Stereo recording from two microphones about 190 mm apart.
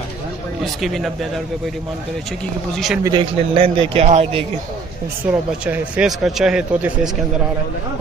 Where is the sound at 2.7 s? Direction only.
Centre (ahead or behind).